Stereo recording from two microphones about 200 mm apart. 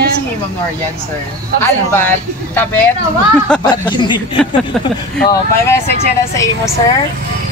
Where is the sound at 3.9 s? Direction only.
25° left (ahead or behind).